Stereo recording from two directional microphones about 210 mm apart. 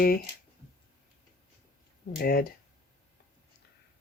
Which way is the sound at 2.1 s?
45° left (ahead or behind).